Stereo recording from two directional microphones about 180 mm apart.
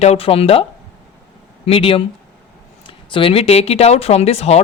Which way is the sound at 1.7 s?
30° left (ahead or behind).